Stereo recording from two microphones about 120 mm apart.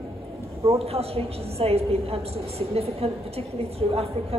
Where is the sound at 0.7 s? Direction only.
55° right (ahead or behind).